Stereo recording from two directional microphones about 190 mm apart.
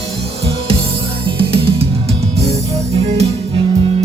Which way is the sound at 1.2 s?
30° right (ahead or behind).